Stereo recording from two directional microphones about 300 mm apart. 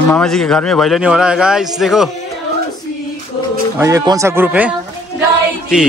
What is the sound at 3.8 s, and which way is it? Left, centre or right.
Speech, centre.